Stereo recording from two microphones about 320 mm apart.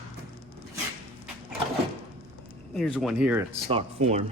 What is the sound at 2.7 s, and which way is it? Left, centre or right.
Speech, centre.